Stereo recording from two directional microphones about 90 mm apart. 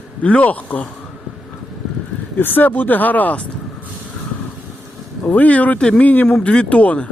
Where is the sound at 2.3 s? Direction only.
20° left (ahead or behind).